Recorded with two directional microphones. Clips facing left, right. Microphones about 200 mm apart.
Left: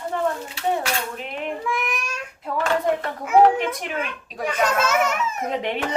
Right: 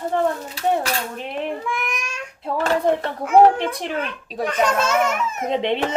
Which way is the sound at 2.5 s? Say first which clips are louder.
Right 2 dB; 35° right (ahead or behind).